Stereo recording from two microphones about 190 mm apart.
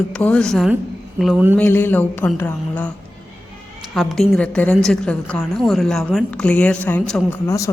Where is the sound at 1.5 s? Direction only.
10° left (ahead or behind).